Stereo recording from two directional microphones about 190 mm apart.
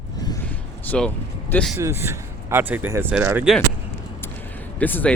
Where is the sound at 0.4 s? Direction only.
5° left (ahead or behind).